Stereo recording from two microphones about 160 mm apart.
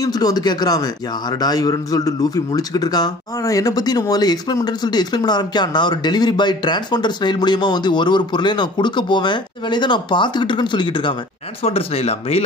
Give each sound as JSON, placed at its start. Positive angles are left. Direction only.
{"t": 0.0, "sound": "a man's voice", "side_deg": 25}